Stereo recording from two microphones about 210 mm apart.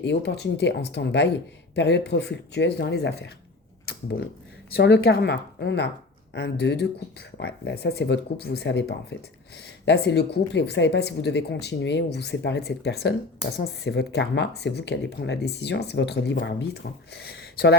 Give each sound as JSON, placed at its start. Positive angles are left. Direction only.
{"t": 0.0, "sound": "speech", "side_deg": 55}
{"t": 3.8, "sound": "a sound", "side_deg": 50}
{"t": 4.7, "sound": "speech", "side_deg": 50}